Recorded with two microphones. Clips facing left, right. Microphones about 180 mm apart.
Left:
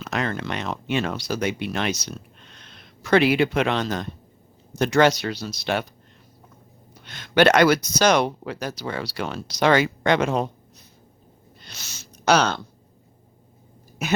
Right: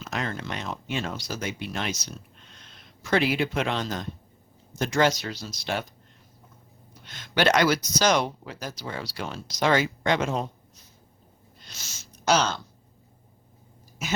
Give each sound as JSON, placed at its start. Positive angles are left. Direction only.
{"t": 0.0, "sound": "speech", "side_deg": 70}
{"t": 7.0, "sound": "speech", "side_deg": 70}
{"t": 11.6, "sound": "a sound", "side_deg": 65}
{"t": 14.0, "sound": "speech", "side_deg": 60}